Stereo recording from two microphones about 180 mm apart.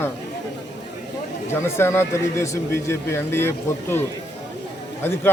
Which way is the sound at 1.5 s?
15° left (ahead or behind).